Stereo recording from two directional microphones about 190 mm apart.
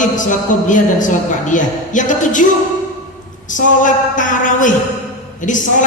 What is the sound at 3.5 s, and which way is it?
A woman's voice, 45° left (ahead or behind).